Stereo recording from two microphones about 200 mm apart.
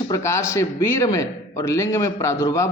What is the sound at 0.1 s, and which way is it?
A man's voice, 15° left (ahead or behind).